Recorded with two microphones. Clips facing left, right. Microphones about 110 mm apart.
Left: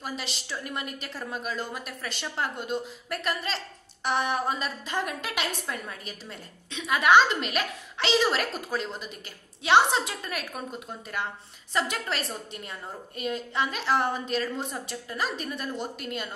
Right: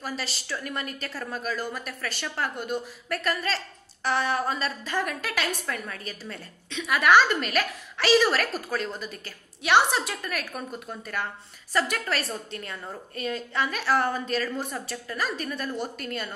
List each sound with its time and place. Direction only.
0.0 s a woman's voice: 20° left (ahead or behind)